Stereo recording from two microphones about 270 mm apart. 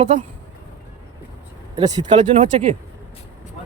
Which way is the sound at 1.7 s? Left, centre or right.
Centre.